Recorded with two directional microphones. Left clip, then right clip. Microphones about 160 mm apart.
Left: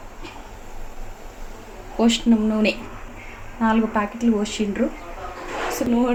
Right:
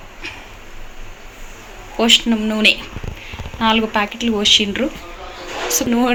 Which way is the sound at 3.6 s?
10° right (ahead or behind).